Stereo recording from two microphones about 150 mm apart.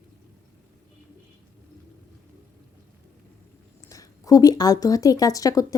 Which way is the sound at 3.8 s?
25° left (ahead or behind).